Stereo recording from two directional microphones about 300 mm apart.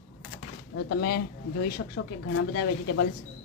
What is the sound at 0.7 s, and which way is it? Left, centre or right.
Speech, left.